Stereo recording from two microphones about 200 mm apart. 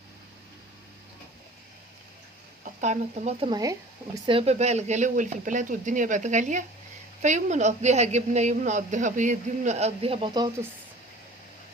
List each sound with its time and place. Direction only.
2.8 s a woman's voice: 35° right (ahead or behind)
3.5 s a woman's voice: 15° right (ahead or behind)